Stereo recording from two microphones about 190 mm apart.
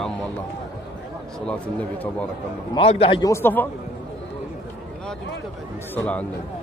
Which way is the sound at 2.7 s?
30° left (ahead or behind).